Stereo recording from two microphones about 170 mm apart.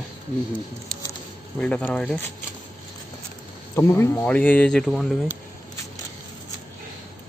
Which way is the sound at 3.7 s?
15° left (ahead or behind).